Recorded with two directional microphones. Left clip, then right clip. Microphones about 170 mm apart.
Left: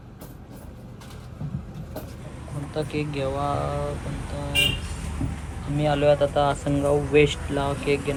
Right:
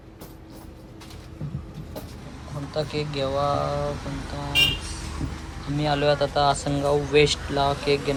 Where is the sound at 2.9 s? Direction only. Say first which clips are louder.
Even; 65° right (ahead or behind).